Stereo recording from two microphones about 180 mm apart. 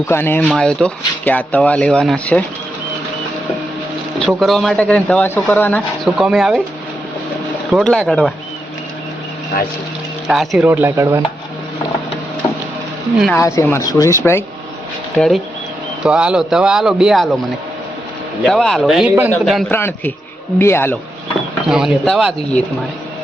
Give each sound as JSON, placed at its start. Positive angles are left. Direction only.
{"t": 0.0, "sound": "speech", "side_deg": 15}
{"t": 4.3, "sound": "speech", "side_deg": 0}
{"t": 6.1, "sound": "speech", "side_deg": 0}
{"t": 7.7, "sound": "speech", "side_deg": 0}
{"t": 10.2, "sound": "speech", "side_deg": 0}
{"t": 10.7, "sound": "speech", "side_deg": -10}
{"t": 13.3, "sound": "speech", "side_deg": 15}
{"t": 15.1, "sound": "speech", "side_deg": 5}
{"t": 18.4, "sound": "speech", "side_deg": 0}
{"t": 21.7, "sound": "speech", "side_deg": -5}